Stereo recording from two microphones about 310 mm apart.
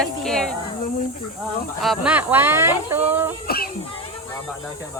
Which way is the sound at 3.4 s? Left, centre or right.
Left.